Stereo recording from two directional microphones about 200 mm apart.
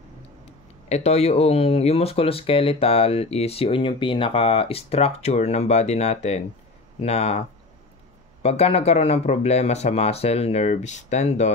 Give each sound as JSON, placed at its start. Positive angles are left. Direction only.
{"t": 0.8, "sound": "speech", "side_deg": 35}